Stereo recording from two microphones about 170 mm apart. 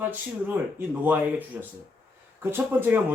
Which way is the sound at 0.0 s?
10° right (ahead or behind).